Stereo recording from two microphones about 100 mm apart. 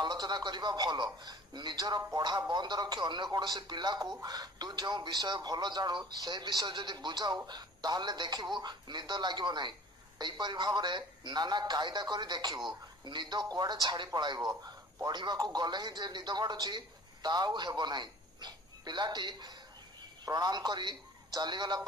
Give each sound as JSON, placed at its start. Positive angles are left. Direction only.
{"t": 0.0, "sound": "speech", "side_deg": -45}